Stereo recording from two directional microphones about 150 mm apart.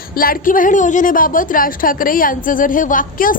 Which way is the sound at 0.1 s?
75° left (ahead or behind).